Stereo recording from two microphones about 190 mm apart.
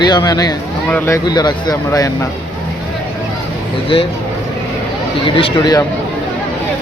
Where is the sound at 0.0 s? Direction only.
20° left (ahead or behind).